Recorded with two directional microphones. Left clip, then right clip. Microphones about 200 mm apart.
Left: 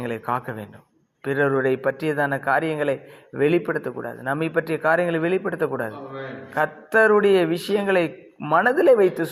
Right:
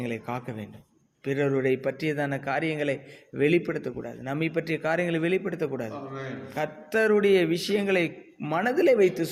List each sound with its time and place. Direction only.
0.0 s speech: centre (ahead or behind)